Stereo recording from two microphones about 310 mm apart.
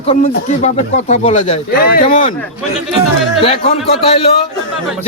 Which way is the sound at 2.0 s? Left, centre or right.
Centre.